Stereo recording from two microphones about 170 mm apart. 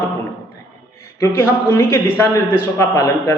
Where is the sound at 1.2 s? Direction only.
15° left (ahead or behind).